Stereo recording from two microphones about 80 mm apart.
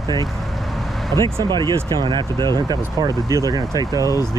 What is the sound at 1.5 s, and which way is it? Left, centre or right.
Speech, right.